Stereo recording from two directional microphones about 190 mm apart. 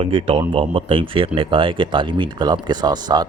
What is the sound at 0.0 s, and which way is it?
Speech, 30° right (ahead or behind).